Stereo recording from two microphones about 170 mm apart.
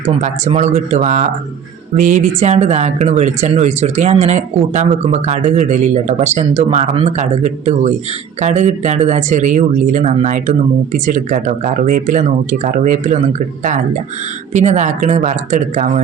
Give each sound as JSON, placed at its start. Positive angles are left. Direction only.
{"t": 0.2, "sound": "speech", "side_deg": -45}
{"t": 14.5, "sound": "speech", "side_deg": -45}